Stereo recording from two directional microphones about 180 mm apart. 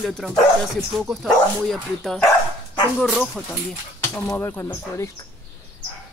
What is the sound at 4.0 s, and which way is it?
Speech, 15° left (ahead or behind).